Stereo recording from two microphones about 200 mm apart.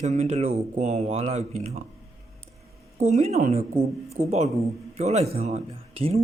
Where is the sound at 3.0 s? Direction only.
35° right (ahead or behind).